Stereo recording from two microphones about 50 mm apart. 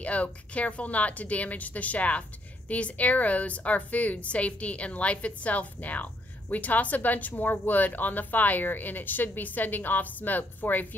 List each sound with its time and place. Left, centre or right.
0.0 s a woman's voice: left